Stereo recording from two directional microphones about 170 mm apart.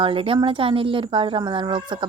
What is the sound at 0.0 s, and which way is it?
A woman's voice, 30° right (ahead or behind).